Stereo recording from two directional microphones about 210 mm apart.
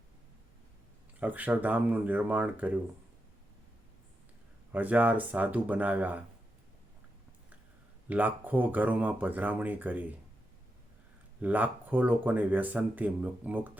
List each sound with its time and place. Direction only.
1.2 s speech: 10° right (ahead or behind)
4.7 s speech: 10° right (ahead or behind)
8.0 s speech: 5° right (ahead or behind)
11.3 s speech: 5° right (ahead or behind)